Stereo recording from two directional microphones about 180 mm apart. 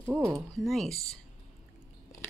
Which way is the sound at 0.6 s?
Centre (ahead or behind).